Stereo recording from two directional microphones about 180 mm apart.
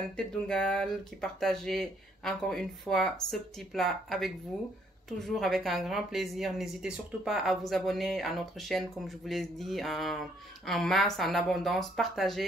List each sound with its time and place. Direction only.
0.1 s speech: 5° left (ahead or behind)